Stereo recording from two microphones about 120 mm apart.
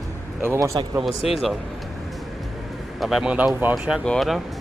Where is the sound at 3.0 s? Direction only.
5° right (ahead or behind).